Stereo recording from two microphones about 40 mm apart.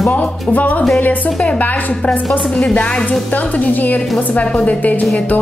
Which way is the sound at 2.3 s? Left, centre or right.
Left.